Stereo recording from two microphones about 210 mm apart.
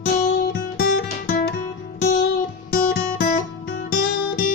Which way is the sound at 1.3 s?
45° left (ahead or behind).